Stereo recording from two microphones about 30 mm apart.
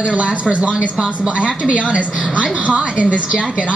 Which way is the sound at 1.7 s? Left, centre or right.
Right.